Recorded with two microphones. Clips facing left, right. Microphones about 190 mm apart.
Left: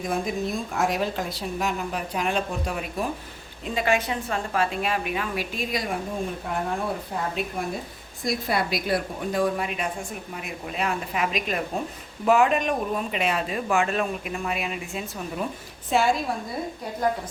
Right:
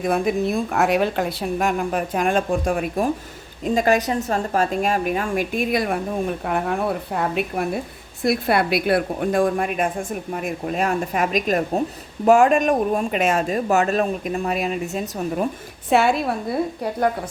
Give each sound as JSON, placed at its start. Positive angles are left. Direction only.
{"t": 0.0, "sound": "a woman's voice", "side_deg": -65}
{"t": 15.9, "sound": "a woman's voice", "side_deg": -65}